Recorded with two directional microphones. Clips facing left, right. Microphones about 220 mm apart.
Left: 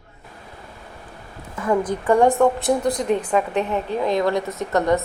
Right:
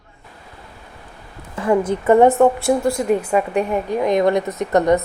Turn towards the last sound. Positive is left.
turn(degrees=-20)  # may be behind; listen again after turning